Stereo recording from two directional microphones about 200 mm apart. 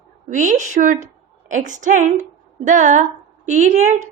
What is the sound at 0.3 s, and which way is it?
A woman's voice, 40° right (ahead or behind).